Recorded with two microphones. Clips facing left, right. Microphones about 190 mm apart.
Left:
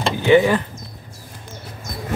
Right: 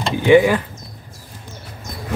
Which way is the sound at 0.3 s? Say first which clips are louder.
Right 2 dB; 15° right (ahead or behind).